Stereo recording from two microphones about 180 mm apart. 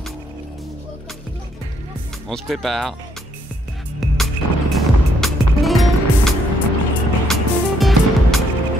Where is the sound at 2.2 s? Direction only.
Centre (ahead or behind).